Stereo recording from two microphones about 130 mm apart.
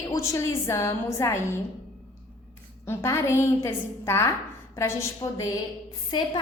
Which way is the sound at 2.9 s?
20° left (ahead or behind).